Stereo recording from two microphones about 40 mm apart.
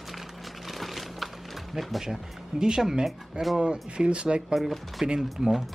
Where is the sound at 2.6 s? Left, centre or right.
Centre.